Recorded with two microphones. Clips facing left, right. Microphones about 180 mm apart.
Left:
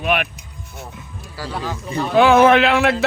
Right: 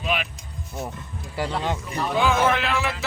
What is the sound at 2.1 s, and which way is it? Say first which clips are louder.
Speech: left 10 dB; 70° left (ahead or behind).